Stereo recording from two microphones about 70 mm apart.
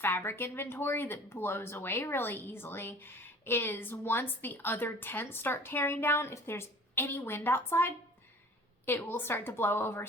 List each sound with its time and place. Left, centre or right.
0.0 s speech: left